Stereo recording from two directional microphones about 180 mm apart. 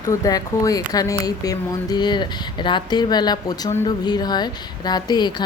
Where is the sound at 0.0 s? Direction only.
20° left (ahead or behind).